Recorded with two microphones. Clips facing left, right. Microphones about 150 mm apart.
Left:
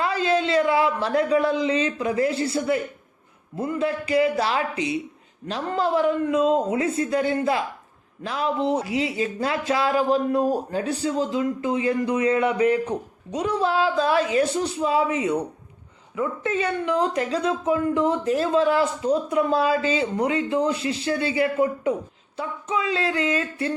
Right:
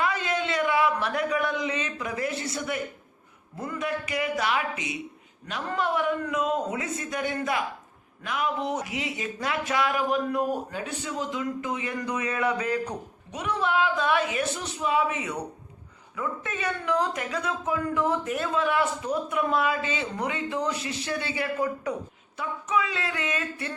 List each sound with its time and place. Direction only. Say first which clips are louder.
0.0 s a man's voice: left 5 dB; 30° left (ahead or behind)